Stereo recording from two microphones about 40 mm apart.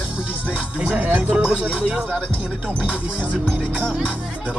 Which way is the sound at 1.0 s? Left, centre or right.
Right.